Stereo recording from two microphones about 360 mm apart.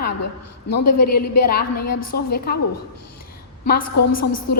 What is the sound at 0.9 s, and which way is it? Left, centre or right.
A woman's voice, left.